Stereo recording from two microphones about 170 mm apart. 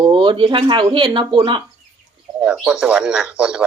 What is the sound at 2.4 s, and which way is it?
Speech, 5° right (ahead or behind).